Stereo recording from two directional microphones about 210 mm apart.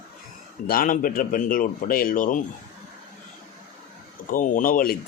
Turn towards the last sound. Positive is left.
turn(degrees=40)  # may be behind; listen again after turning